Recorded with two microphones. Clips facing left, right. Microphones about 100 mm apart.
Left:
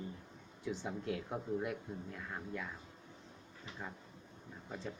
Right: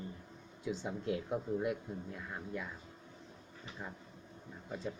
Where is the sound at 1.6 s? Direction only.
15° right (ahead or behind).